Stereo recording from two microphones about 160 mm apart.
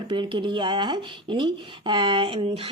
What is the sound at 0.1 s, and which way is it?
Speech, 30° right (ahead or behind).